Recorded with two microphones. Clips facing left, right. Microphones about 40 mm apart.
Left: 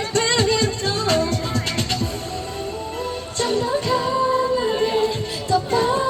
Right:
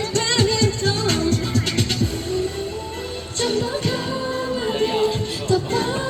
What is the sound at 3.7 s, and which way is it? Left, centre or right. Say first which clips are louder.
Music: left 4 dB; centre.